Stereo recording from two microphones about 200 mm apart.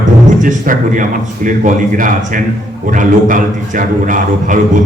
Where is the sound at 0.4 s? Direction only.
40° right (ahead or behind).